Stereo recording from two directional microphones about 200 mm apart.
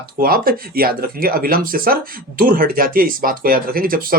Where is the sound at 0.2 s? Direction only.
45° right (ahead or behind).